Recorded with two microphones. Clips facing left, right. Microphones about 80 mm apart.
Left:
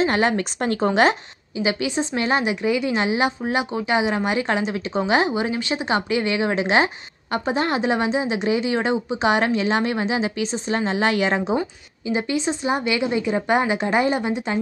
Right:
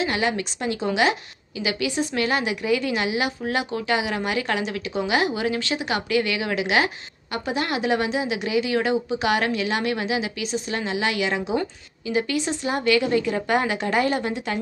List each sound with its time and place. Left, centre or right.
0.0 s speech: left
1.6 s a woman's voice: left
12.1 s a woman's voice: left